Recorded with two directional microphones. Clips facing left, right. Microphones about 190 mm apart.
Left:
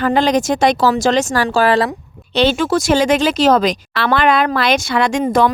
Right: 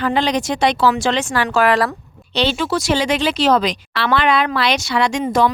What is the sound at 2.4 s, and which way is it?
Speech, 50° left (ahead or behind).